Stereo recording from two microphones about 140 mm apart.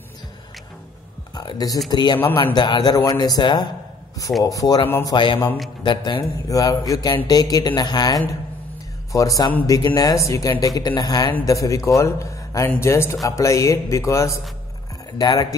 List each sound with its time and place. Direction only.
1.3 s a man's voice: 30° left (ahead or behind)